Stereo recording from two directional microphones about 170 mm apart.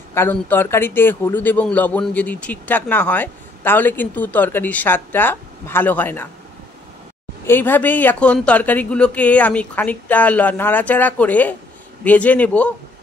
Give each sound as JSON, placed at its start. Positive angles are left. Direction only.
{"t": 0.1, "sound": "a man's voice", "side_deg": 15}
{"t": 7.4, "sound": "a man's voice", "side_deg": 10}